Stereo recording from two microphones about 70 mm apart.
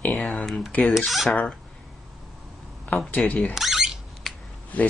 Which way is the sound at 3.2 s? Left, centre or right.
Centre.